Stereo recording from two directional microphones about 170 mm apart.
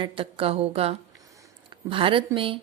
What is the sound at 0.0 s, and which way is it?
A woman's voice, 35° right (ahead or behind).